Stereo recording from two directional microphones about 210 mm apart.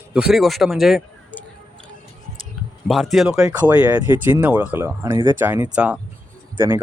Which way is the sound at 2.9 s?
Centre (ahead or behind).